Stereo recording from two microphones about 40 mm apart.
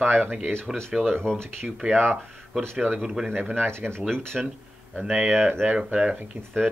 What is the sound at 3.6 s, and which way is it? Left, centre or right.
Speech, right.